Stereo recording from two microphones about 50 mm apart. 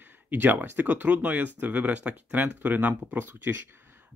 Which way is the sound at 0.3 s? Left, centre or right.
Right.